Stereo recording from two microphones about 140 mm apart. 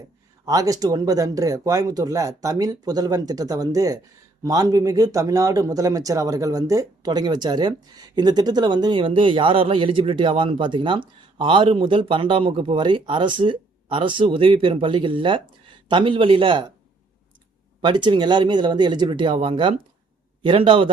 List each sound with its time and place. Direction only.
0.4 s speech: 25° right (ahead or behind)
17.8 s speech: 35° right (ahead or behind)